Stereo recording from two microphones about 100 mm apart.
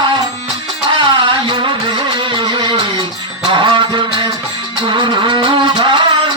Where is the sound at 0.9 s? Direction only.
55° right (ahead or behind).